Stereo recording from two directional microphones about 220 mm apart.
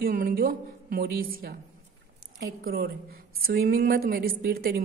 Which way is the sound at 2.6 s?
45° right (ahead or behind).